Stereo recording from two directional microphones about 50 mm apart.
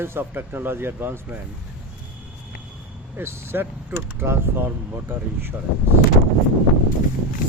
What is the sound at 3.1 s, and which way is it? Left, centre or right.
Speech, right.